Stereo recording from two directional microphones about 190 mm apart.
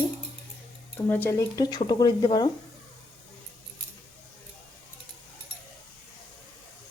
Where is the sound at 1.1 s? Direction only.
15° left (ahead or behind).